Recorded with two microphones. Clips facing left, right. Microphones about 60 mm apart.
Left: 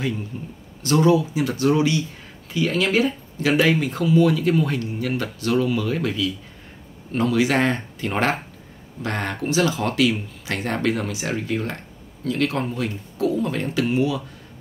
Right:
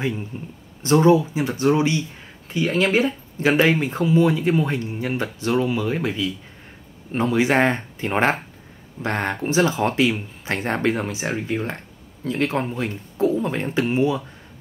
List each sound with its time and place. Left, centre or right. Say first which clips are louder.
0.3 s speech: even; right